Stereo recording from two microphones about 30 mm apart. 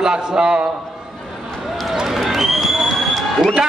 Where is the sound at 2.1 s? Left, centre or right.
Centre.